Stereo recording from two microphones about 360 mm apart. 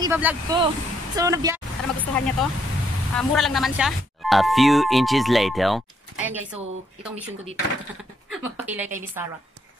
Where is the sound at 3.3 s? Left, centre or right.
Centre.